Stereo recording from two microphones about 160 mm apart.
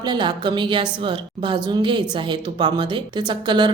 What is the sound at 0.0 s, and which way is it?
A woman's voice, 25° right (ahead or behind).